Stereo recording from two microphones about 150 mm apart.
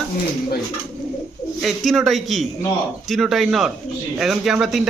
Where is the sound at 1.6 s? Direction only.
Centre (ahead or behind).